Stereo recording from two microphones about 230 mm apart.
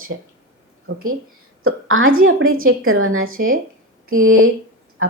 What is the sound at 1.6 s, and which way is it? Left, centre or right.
Speech, right.